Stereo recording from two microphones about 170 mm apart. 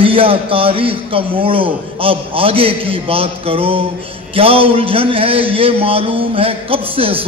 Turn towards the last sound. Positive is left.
turn(degrees=-35)  # may be behind; listen again after turning